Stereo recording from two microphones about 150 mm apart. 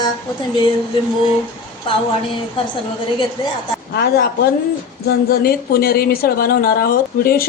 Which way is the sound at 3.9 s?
90° left.